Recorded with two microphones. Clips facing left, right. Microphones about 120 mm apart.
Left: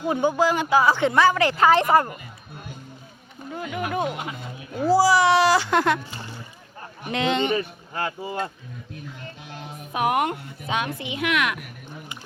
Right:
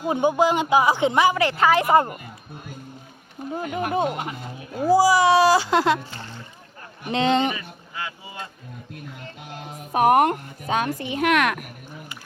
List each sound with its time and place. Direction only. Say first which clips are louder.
0.0 s speech: right 1 dB; 20° right (ahead or behind)
1.4 s a woman's voice: left 1 dB; 35° left (ahead or behind)
3.5 s speech: right 3 dB; 40° right (ahead or behind)
4.8 s speech: right 1 dB; 20° right (ahead or behind)
6.1 s speech: even; 10° left (ahead or behind)
7.1 s speech: right 3 dB; 35° right (ahead or behind)
7.5 s speech: left 9 dB; 45° left (ahead or behind)
9.9 s speech: right 6 dB; 40° right (ahead or behind)